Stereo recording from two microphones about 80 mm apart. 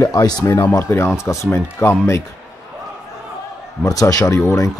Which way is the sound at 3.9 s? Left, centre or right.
Left.